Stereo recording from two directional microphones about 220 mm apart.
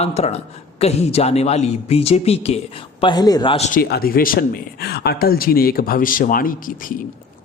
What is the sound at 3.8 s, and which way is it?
Speech, 45° left (ahead or behind).